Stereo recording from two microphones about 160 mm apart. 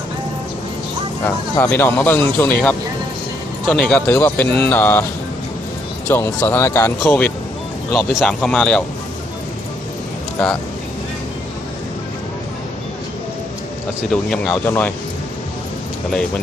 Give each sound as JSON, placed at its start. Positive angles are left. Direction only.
{"t": 1.5, "sound": "speech", "side_deg": 15}
{"t": 6.1, "sound": "speech", "side_deg": 15}
{"t": 14.1, "sound": "speech", "side_deg": 5}